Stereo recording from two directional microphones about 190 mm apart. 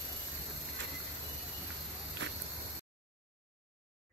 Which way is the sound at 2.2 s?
70° right (ahead or behind).